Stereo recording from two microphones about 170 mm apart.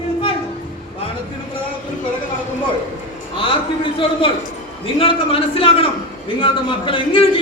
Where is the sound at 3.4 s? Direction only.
30° left (ahead or behind).